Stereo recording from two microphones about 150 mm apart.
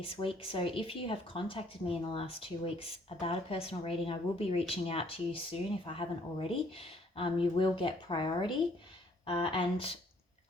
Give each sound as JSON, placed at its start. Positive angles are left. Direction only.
{"t": 0.0, "sound": "speech", "side_deg": 40}